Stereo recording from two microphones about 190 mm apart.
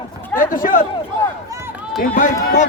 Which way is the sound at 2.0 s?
45° left (ahead or behind).